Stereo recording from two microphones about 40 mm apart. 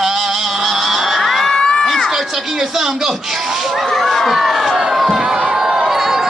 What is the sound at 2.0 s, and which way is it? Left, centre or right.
A man's voice, centre.